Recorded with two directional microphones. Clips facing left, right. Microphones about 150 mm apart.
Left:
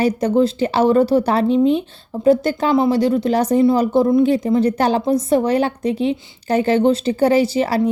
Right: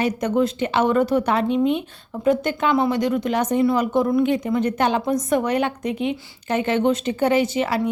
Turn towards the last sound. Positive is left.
turn(degrees=35)  # may be behind; listen again after turning